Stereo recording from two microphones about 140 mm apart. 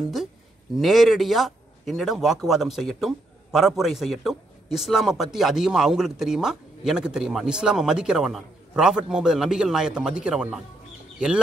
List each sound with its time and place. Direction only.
0.7 s speech: centre (ahead or behind)